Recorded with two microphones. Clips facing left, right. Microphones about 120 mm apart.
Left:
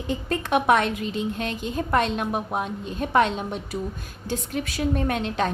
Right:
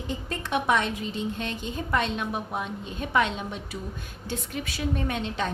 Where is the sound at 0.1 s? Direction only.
60° left (ahead or behind).